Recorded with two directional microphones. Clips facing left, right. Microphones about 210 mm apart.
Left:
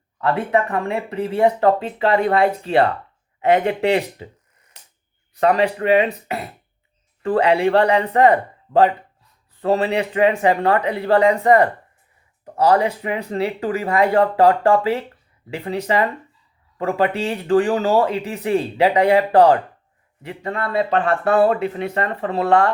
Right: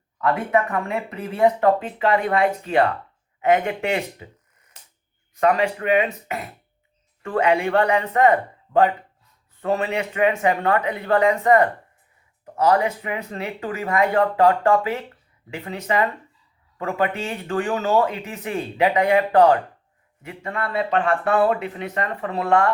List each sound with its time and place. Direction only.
0.2 s speech: 30° left (ahead or behind)
5.3 s speech: 30° left (ahead or behind)